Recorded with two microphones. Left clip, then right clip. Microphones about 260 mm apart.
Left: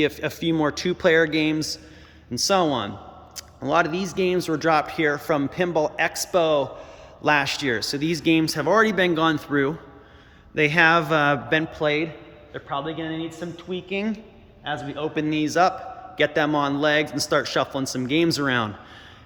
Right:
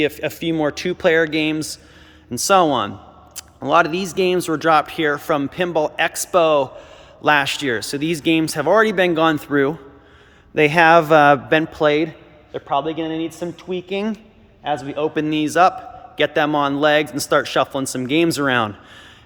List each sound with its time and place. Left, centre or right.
0.0 s a man's voice: centre